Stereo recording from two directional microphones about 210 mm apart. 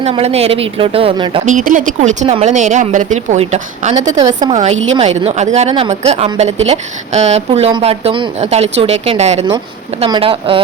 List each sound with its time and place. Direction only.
0.0 s speech: 30° right (ahead or behind)
1.5 s a woman's voice: 35° right (ahead or behind)
4.2 s speech: 20° right (ahead or behind)
4.7 s a woman's voice: 65° right (ahead or behind)
4.9 s a woman's voice: 30° right (ahead or behind)